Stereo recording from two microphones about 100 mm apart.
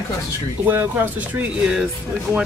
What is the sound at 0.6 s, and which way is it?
Speech, 20° right (ahead or behind).